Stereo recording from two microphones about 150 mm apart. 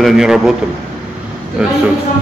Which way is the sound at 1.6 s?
10° right (ahead or behind).